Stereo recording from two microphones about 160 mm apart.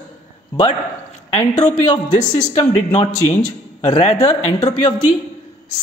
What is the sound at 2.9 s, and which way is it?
Speech, 40° left (ahead or behind).